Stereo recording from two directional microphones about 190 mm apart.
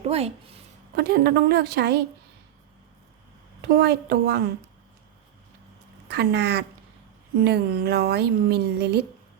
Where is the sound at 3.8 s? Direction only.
60° right (ahead or behind).